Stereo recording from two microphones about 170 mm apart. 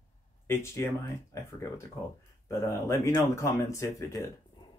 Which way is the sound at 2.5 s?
15° left (ahead or behind).